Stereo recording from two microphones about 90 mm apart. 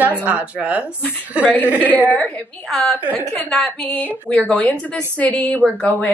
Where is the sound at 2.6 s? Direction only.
5° left (ahead or behind).